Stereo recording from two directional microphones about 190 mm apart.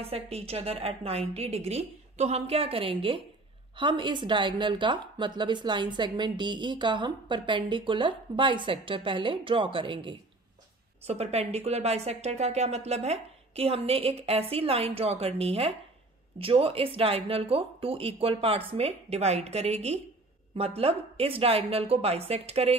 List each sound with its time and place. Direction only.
0.0 s a woman's voice: 30° right (ahead or behind)